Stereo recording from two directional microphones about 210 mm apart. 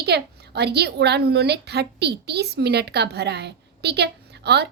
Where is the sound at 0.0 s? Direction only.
50° right (ahead or behind).